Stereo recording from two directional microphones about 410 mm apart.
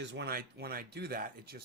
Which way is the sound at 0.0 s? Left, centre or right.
Right.